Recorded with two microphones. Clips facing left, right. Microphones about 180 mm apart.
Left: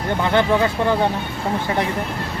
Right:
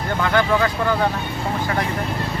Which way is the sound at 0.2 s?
20° left (ahead or behind).